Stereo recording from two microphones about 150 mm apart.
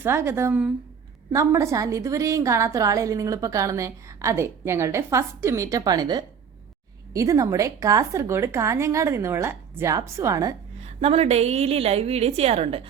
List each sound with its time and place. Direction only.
0.0 s a woman's voice: 15° right (ahead or behind)
10.8 s a woman's voice: 45° right (ahead or behind)